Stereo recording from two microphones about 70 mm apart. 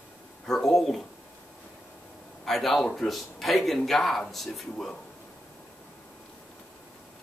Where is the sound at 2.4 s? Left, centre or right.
Centre.